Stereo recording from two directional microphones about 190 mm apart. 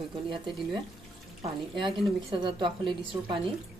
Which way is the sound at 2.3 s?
25° right (ahead or behind).